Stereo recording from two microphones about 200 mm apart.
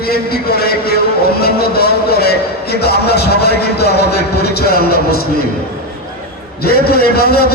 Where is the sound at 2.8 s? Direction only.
55° left (ahead or behind).